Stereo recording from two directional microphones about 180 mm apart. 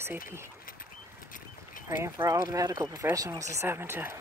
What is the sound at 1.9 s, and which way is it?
Speech, 20° right (ahead or behind).